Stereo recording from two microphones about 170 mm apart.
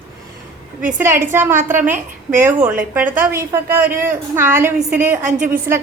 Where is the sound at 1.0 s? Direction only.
15° right (ahead or behind).